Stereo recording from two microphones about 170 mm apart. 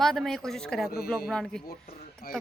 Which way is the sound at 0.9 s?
60° left (ahead or behind).